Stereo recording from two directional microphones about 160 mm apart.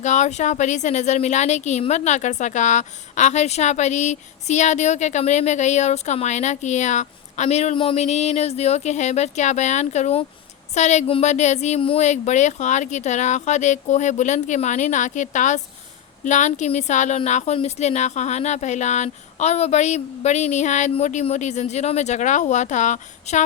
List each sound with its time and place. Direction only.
0.0 s a woman's voice: 50° left (ahead or behind)